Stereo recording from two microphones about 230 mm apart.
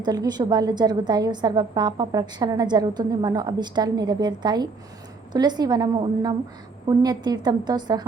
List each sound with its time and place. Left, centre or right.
0.0 s a woman's voice: centre